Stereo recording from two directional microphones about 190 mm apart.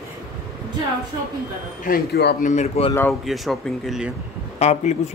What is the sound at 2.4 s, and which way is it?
Speech, 35° left (ahead or behind).